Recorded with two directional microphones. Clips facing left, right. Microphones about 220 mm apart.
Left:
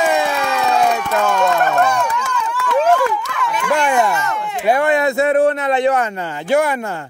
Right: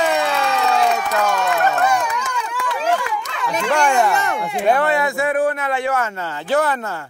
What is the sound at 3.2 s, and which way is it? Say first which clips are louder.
Run: left 3 dB; 25° right (ahead or behind).